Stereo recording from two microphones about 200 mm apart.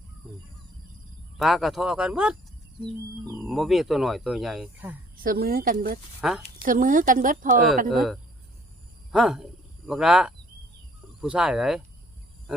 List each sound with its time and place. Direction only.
1.4 s speech: centre (ahead or behind)
3.3 s speech: centre (ahead or behind)
5.2 s speech: 45° right (ahead or behind)
6.2 s speech: 5° right (ahead or behind)
6.6 s speech: 45° right (ahead or behind)
7.9 s speech: centre (ahead or behind)